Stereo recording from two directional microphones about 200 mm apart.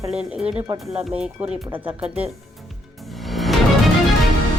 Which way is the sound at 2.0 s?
30° right (ahead or behind).